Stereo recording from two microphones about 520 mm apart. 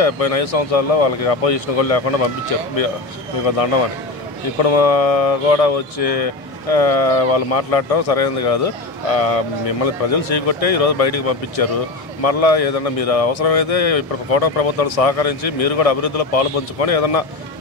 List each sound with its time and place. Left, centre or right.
0.0 s speech: left
3.4 s speech: left